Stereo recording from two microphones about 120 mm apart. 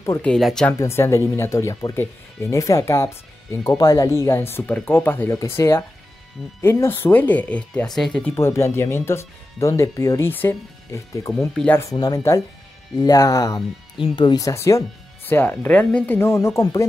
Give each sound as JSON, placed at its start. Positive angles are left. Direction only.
{"t": 0.2, "sound": "speech", "side_deg": 5}
{"t": 0.7, "sound": "speech", "side_deg": 20}
{"t": 8.4, "sound": "speech", "side_deg": 20}
{"t": 11.3, "sound": "speech", "side_deg": 5}
{"t": 11.7, "sound": "speech", "side_deg": 25}
{"t": 14.0, "sound": "speech", "side_deg": 40}